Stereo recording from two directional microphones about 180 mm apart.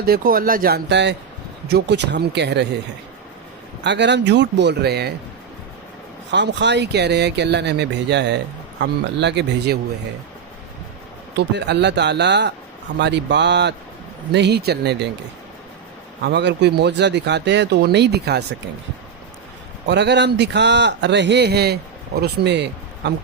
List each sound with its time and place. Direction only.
0.0 s a man's voice: 55° right (ahead or behind); by 2.6 s 70° right (ahead or behind)
3.8 s a man's voice: 75° right (ahead or behind)
6.3 s a man's voice: 75° right (ahead or behind)
11.3 s a man's voice: 70° right (ahead or behind)
16.2 s a man's voice: 75° right (ahead or behind)
19.9 s a man's voice: 75° right (ahead or behind)